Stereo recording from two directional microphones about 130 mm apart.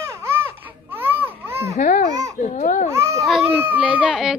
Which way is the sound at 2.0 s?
30° right (ahead or behind).